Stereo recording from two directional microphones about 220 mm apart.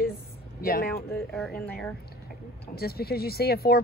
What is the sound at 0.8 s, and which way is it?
Speech, 5° left (ahead or behind).